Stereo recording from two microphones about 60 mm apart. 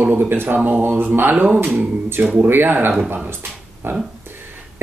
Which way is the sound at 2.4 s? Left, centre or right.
Right.